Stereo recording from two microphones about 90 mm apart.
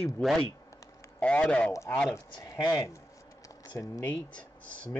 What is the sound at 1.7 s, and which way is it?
Speech, 35° left (ahead or behind).